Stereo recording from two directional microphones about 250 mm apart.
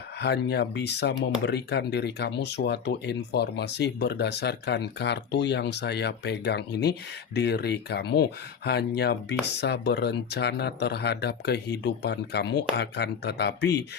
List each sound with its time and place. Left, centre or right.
0.2 s speech: left